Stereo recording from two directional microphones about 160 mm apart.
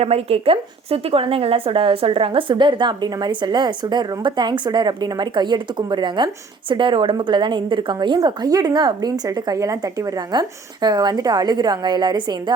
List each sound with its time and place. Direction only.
0.0 s speech: 40° right (ahead or behind)